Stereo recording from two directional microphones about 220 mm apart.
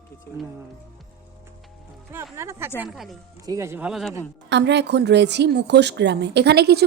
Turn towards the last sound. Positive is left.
turn(degrees=-50)  # may be behind; listen again after turning